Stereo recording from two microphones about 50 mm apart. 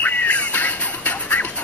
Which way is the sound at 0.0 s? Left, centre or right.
Left.